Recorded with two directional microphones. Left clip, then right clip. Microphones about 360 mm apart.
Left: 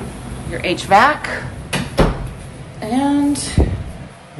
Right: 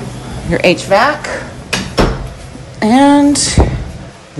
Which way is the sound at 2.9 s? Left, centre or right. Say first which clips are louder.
Right 9 dB; centre.